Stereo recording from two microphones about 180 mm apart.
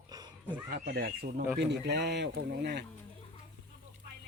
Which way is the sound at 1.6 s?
70° right (ahead or behind).